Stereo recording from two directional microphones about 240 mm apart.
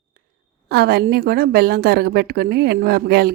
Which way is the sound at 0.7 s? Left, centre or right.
Right.